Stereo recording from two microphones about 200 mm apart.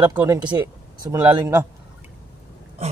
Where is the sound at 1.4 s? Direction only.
10° right (ahead or behind).